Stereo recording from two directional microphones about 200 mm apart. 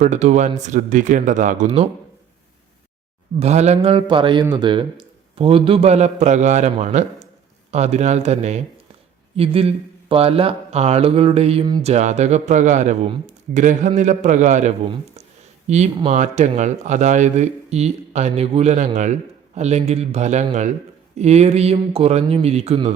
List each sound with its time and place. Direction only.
0.0 s speech: 35° right (ahead or behind)
3.4 s a man's voice: 35° right (ahead or behind)